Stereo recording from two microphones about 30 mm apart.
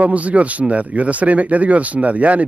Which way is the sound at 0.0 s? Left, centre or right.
Right.